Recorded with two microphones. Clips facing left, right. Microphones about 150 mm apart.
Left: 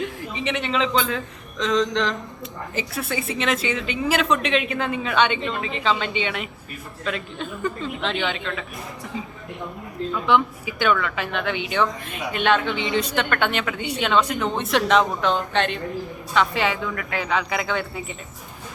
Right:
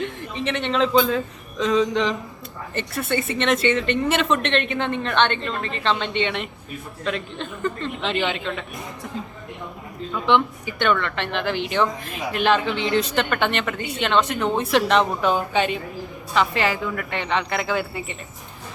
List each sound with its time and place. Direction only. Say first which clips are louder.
0.0 s speech: even; centre (ahead or behind)
10.1 s speech: right 1 dB; centre (ahead or behind)